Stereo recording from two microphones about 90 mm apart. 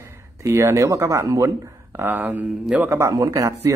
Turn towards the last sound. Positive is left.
turn(degrees=-35)  # may be behind; listen again after turning